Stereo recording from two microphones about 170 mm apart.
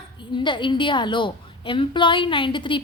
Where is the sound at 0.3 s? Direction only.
30° left (ahead or behind).